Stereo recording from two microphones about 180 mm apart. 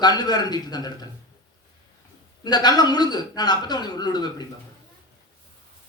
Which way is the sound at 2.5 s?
25° left (ahead or behind).